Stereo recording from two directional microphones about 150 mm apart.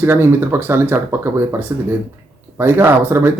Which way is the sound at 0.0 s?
15° right (ahead or behind).